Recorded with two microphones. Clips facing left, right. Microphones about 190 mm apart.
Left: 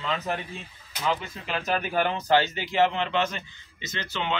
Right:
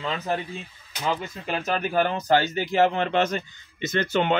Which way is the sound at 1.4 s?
45° right (ahead or behind).